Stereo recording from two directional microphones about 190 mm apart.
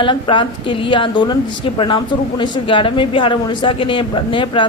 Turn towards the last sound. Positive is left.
turn(degrees=25)  # may be behind; listen again after turning